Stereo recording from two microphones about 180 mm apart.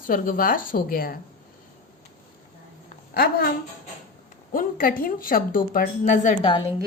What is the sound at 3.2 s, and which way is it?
Speech, 55° left (ahead or behind).